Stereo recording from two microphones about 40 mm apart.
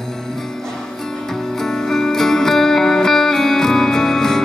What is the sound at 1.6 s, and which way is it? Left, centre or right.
Music, centre.